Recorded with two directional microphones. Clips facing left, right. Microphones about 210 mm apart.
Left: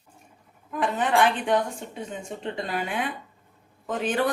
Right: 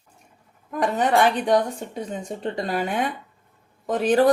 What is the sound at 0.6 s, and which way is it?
A woman's voice, 40° right (ahead or behind).